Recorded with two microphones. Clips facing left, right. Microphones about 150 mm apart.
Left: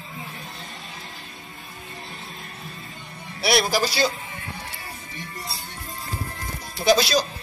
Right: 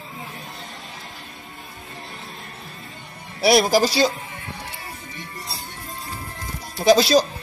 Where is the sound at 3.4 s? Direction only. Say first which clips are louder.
Right 5 dB; 40° right (ahead or behind).